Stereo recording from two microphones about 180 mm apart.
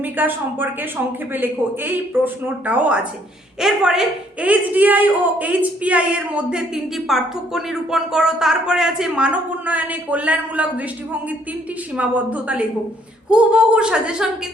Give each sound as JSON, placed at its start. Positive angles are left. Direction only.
{"t": 0.0, "sound": "speech", "side_deg": -10}